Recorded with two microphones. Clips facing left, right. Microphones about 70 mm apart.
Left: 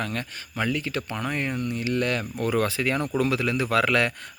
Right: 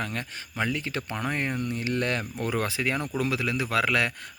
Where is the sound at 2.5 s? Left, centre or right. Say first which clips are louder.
Left 4 dB; centre.